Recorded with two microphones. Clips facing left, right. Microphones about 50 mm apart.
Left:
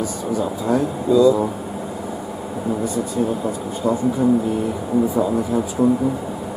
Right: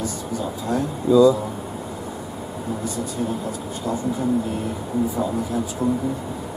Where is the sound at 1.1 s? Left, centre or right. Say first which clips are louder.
Even; centre.